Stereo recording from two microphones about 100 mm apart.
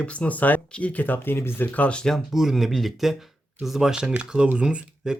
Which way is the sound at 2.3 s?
5° right (ahead or behind).